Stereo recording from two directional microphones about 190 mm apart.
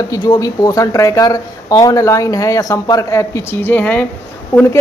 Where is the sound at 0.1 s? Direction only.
20° left (ahead or behind).